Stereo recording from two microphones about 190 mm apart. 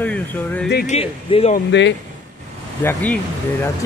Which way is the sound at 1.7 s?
70° left (ahead or behind).